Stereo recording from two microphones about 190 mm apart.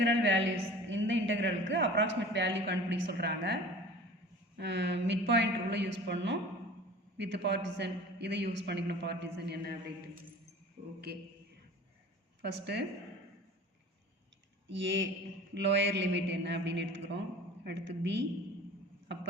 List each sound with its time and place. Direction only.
0.0 s a woman's voice: 70° right (ahead or behind)
12.4 s speech: 60° right (ahead or behind)
15.5 s a woman's voice: 70° right (ahead or behind)